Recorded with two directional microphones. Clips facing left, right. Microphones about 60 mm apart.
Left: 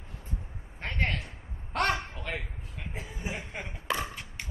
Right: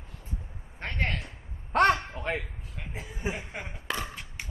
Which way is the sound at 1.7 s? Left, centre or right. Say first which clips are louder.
Right 6 dB; right.